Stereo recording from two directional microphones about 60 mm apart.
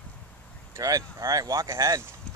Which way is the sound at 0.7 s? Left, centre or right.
Right.